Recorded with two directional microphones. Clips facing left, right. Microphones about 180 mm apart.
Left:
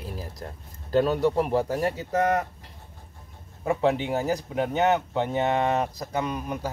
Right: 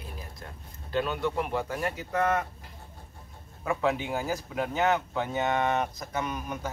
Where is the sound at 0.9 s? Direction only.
40° left (ahead or behind).